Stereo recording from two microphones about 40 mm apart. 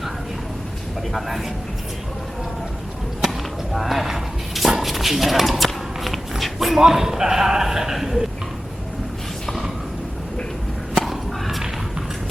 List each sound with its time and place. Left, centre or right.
1.1 s a man's voice: centre
3.2 s speech: centre
10.9 s a sound: centre